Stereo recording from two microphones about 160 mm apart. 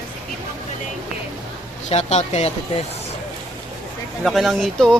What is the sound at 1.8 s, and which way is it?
Speech, 45° left (ahead or behind).